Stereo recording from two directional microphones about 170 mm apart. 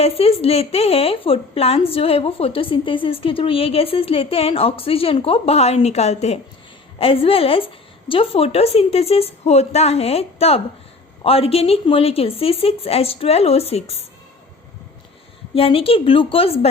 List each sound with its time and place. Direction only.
0.0 s a woman's voice: 35° left (ahead or behind)
15.5 s a woman's voice: 35° left (ahead or behind)